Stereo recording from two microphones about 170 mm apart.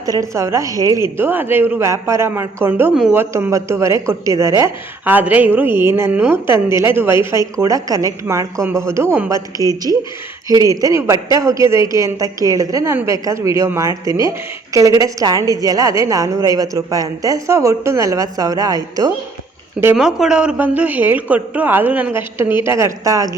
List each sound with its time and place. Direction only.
0.0 s a woman's voice: 20° right (ahead or behind)
9.6 s speech: 20° left (ahead or behind)
10.5 s a woman's voice: 20° right (ahead or behind)